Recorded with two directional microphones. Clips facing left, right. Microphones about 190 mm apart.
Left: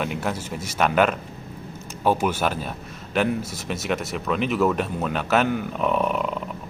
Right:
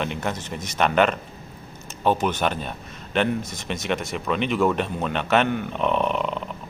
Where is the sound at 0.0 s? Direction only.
5° left (ahead or behind).